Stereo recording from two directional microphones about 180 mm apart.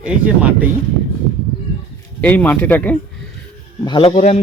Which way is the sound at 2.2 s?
10° left (ahead or behind).